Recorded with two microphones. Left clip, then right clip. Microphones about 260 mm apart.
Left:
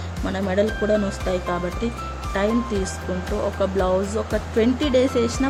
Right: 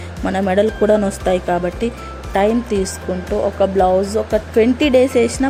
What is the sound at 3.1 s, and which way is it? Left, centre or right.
Speech, centre.